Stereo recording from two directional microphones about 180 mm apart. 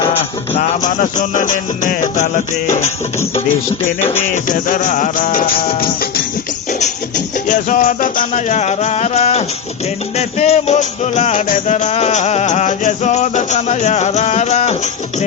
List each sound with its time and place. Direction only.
0.5 s music: 45° left (ahead or behind)
4.0 s music: 10° left (ahead or behind)
4.4 s music: 45° left (ahead or behind)
7.4 s music: 45° left (ahead or behind)